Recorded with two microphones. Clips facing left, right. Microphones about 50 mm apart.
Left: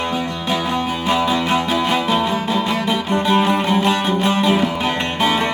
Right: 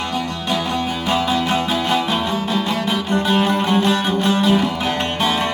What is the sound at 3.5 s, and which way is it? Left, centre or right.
Music, left.